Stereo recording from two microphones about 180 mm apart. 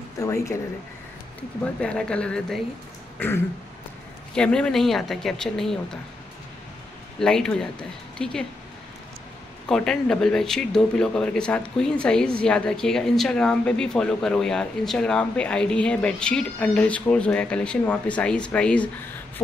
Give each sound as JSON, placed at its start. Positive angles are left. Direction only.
{"t": 0.2, "sound": "speech", "side_deg": 15}
{"t": 1.8, "sound": "speech", "side_deg": 5}
{"t": 4.4, "sound": "speech", "side_deg": 5}
{"t": 7.2, "sound": "speech", "side_deg": 5}
{"t": 9.7, "sound": "speech", "side_deg": 5}